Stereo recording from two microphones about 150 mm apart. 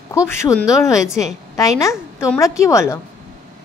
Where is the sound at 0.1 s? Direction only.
20° left (ahead or behind).